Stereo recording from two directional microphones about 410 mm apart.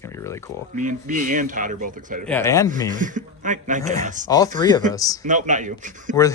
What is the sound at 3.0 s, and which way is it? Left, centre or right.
Speech, centre.